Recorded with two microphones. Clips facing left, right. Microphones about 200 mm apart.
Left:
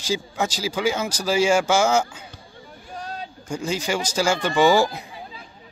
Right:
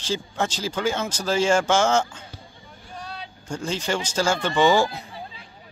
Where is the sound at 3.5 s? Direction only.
10° left (ahead or behind).